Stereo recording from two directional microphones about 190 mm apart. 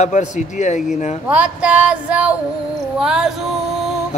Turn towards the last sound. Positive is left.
turn(degrees=0)  # may be behind; listen again after turning